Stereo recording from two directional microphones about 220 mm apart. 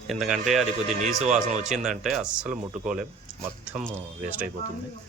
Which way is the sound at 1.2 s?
30° right (ahead or behind).